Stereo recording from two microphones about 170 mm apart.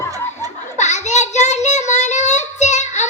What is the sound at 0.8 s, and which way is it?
Child singing, 45° left (ahead or behind).